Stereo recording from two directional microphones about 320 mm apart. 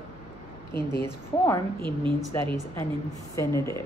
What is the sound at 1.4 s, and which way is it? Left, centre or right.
Speech, centre.